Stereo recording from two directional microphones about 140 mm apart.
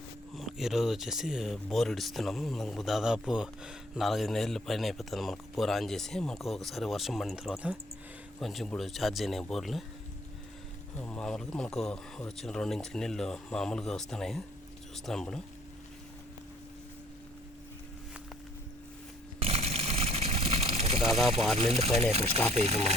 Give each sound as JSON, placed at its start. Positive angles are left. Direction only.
{"t": 0.3, "sound": "speech", "side_deg": 0}
{"t": 10.9, "sound": "speech", "side_deg": 10}
{"t": 19.4, "sound": "a sound", "side_deg": -45}
{"t": 21.0, "sound": "speech", "side_deg": 0}
{"t": 21.6, "sound": "speech", "side_deg": -45}